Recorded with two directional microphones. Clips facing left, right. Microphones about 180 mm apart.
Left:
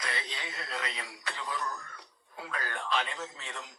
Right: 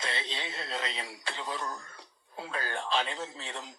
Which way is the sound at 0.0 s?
25° right (ahead or behind).